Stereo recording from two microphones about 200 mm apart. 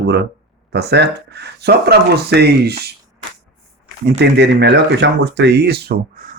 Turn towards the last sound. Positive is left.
turn(degrees=-50)  # may be behind; listen again after turning